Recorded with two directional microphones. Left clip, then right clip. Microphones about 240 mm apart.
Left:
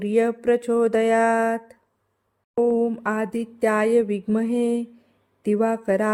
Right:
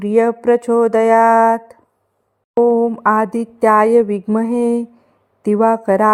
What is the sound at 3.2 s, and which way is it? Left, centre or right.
Speech, centre.